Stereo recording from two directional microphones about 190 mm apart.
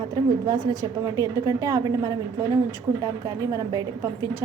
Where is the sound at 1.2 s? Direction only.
20° right (ahead or behind).